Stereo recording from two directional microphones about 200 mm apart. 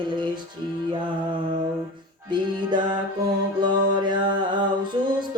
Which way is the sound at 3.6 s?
20° right (ahead or behind).